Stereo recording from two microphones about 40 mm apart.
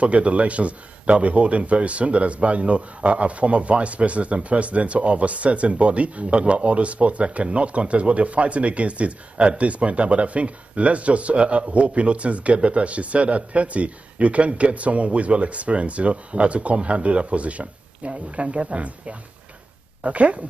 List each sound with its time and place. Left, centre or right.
0.0 s a man's voice: right